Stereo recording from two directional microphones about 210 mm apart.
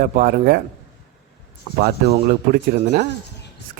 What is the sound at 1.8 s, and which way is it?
Speech, 50° right (ahead or behind).